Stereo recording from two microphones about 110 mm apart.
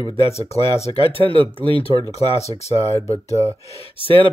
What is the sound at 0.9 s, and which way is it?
Speech, 50° right (ahead or behind).